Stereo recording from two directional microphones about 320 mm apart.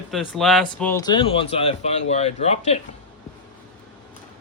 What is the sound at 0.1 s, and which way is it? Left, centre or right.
Speech, centre.